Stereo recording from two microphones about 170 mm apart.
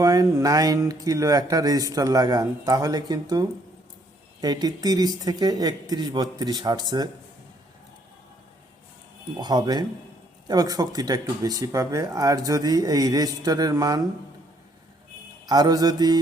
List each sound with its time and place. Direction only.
0.0 s speech: 20° right (ahead or behind)
9.4 s speech: 20° right (ahead or behind)
15.4 s speech: 20° right (ahead or behind)